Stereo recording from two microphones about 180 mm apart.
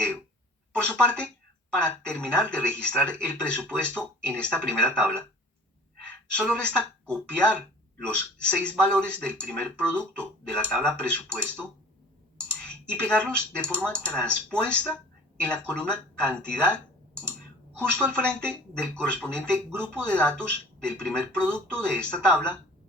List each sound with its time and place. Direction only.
0.7 s a woman's voice: 5° left (ahead or behind)
13.0 s speech: 5° left (ahead or behind)
18.1 s speech: 5° left (ahead or behind)